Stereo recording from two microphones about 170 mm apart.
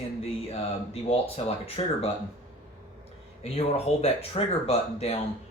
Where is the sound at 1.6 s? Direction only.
35° left (ahead or behind).